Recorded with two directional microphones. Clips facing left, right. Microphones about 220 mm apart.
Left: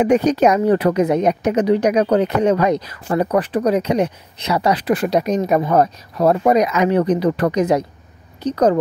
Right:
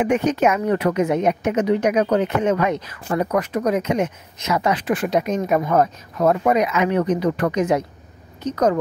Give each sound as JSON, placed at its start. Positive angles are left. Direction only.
{"t": 0.0, "sound": "a woman's voice", "side_deg": 35}